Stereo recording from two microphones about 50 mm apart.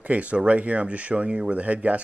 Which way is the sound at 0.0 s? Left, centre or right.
Right.